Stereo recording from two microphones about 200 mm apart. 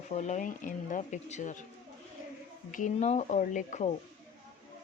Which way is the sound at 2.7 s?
35° left (ahead or behind).